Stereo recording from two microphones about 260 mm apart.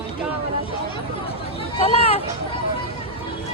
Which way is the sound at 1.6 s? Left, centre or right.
Left.